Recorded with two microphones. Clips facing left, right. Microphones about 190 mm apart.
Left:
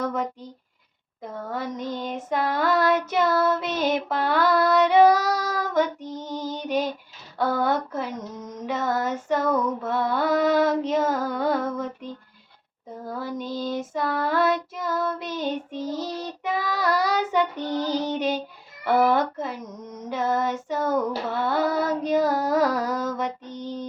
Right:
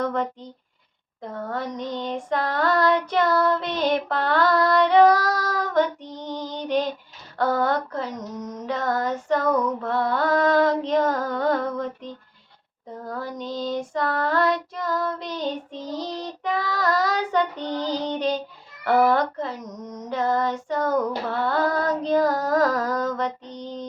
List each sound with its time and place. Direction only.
0.0 s speech: 5° left (ahead or behind)
1.2 s child singing: 5° left (ahead or behind)
6.1 s music: 45° left (ahead or behind)
6.4 s female singing: 5° left (ahead or behind)
7.3 s child singing: 10° left (ahead or behind)
10.6 s female singing: 5° left (ahead or behind)
13.1 s child singing: 10° left (ahead or behind)
17.7 s child singing: 15° right (ahead or behind)
19.0 s child singing: 5° left (ahead or behind)